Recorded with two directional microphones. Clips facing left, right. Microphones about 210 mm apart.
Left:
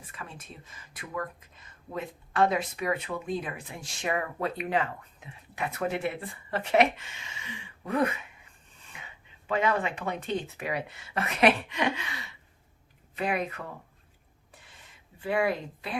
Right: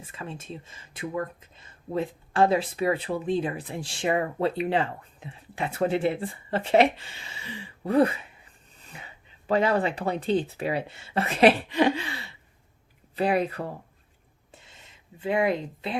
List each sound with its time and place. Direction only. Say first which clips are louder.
0.1 s speech: right 7 dB; 25° right (ahead or behind)
8.8 s a sound: right 4 dB; 35° right (ahead or behind)
9.5 s speech: right 4 dB; 35° right (ahead or behind)
15.2 s speech: right 3 dB; 20° right (ahead or behind)